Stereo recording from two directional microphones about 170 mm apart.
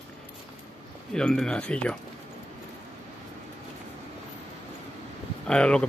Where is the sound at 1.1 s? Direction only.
5° left (ahead or behind).